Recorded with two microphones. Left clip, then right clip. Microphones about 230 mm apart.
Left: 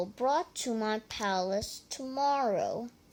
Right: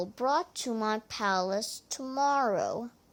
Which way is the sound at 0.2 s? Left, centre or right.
Centre.